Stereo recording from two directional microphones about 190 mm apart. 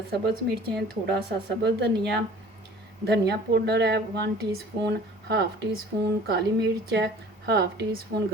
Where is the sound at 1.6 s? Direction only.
60° right (ahead or behind).